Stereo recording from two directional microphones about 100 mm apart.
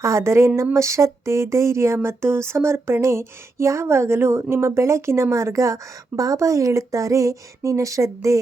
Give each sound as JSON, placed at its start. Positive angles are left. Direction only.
{"t": 0.0, "sound": "speech", "side_deg": -30}